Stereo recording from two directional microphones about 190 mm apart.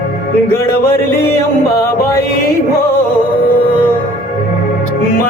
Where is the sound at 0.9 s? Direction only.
15° left (ahead or behind).